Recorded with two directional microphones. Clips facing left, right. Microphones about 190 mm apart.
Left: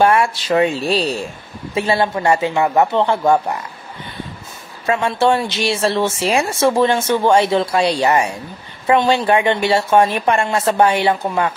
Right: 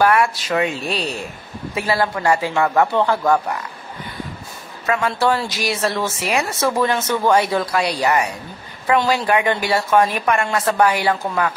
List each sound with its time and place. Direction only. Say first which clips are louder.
0.0 s speech: left 2 dB; 25° left (ahead or behind)
4.8 s speech: left 3 dB; 25° left (ahead or behind)